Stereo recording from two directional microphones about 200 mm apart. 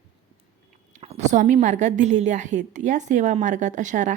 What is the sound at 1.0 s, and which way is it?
Speech, 35° right (ahead or behind).